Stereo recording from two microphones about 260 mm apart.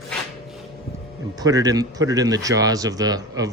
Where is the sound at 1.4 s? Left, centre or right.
Centre.